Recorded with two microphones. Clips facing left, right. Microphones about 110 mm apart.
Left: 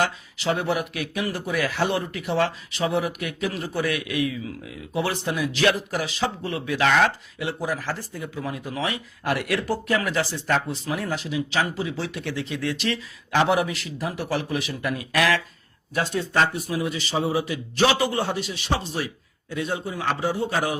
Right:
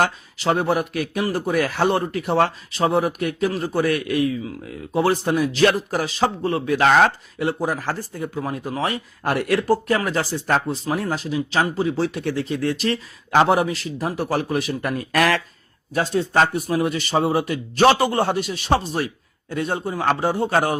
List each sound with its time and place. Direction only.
0.0 s speech: 45° right (ahead or behind)
16.6 s a man's voice: 55° right (ahead or behind)